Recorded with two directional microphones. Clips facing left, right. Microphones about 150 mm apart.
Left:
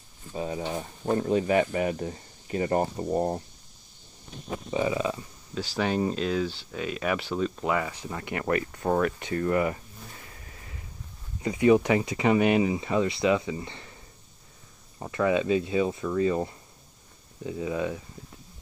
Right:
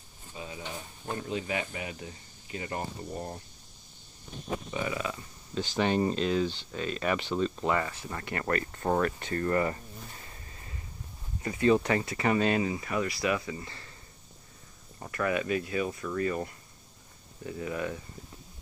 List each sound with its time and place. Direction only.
0.3 s speech: 40° left (ahead or behind)
4.6 s speech: 25° left (ahead or behind)
5.5 s speech: 5° left (ahead or behind)
8.7 s speech: centre (ahead or behind)
11.4 s speech: 15° left (ahead or behind)
15.0 s speech: 20° left (ahead or behind)